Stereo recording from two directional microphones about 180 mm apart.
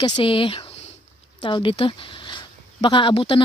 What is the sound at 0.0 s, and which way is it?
A woman's voice, 30° left (ahead or behind).